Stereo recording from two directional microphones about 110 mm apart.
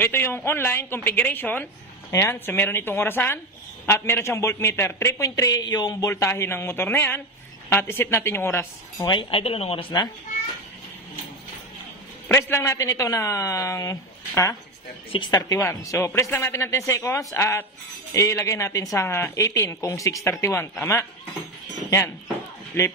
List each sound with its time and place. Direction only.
0.0 s a woman's voice: 20° left (ahead or behind)
9.0 s speech: 50° left (ahead or behind)
12.4 s a woman's voice: 25° left (ahead or behind)
22.8 s a woman's voice: 25° left (ahead or behind)